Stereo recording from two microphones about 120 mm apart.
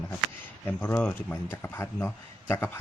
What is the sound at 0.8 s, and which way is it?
Speech, 15° left (ahead or behind).